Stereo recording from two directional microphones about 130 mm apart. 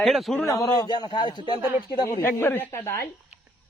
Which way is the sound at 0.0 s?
Centre (ahead or behind).